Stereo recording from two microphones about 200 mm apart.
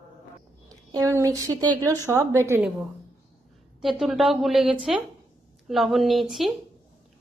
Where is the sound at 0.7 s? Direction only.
15° right (ahead or behind).